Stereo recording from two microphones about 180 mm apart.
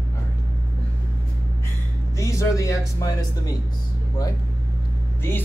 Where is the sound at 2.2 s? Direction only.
15° left (ahead or behind).